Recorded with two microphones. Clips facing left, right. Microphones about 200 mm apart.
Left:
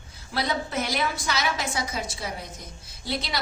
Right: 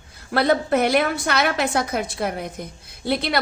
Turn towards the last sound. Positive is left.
turn(degrees=-55)  # may be behind; listen again after turning